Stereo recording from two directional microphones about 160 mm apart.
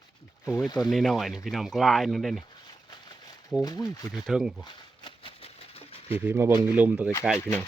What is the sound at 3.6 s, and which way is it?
Speech, 25° left (ahead or behind).